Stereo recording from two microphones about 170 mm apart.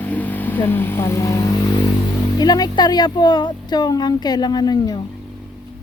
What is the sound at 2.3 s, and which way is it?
Speech, 25° left (ahead or behind).